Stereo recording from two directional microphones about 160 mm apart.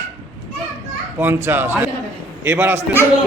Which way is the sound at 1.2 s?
15° right (ahead or behind).